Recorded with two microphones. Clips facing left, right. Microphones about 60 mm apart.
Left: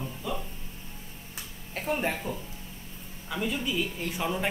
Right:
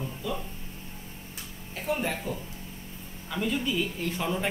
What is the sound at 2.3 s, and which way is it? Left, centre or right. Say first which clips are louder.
Speech: right 1 dB; centre.